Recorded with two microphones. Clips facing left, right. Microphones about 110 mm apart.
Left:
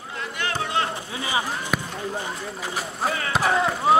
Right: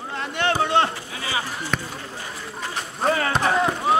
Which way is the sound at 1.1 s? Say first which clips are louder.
Left 2 dB; 20° left (ahead or behind).